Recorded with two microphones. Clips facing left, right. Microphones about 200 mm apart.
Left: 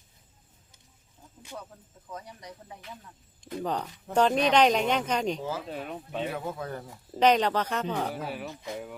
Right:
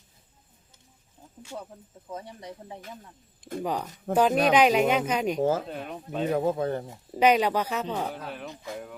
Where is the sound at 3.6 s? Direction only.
10° right (ahead or behind).